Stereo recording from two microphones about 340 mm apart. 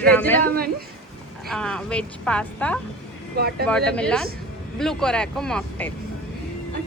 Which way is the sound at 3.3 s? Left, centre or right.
Right.